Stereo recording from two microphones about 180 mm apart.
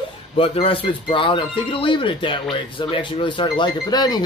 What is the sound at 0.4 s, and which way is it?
Speech, 30° left (ahead or behind).